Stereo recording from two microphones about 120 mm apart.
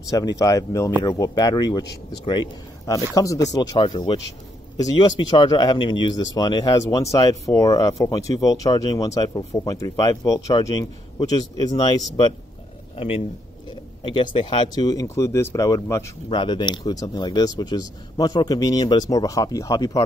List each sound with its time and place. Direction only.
0.1 s speech: 30° left (ahead or behind)
12.9 s speech: 55° left (ahead or behind)
14.0 s speech: 45° left (ahead or behind)